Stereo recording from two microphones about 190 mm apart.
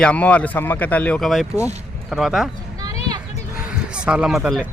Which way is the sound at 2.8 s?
20° right (ahead or behind).